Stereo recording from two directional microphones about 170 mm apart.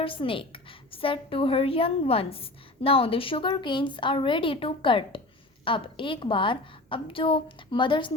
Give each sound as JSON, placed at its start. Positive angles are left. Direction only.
{"t": 0.0, "sound": "a woman's voice", "side_deg": 30}